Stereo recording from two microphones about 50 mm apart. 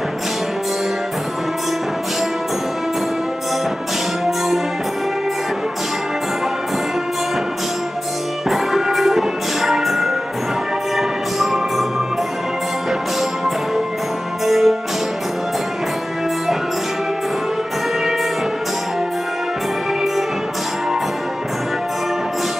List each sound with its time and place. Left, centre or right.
8.5 s music: centre
14.4 s music: centre